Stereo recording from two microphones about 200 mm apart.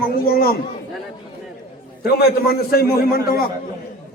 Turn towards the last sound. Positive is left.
turn(degrees=50)  # may be behind; listen again after turning